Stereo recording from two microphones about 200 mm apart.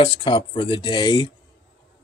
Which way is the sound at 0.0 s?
25° left (ahead or behind).